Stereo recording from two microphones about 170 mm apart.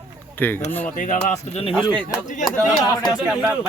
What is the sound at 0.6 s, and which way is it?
Speech, 10° left (ahead or behind).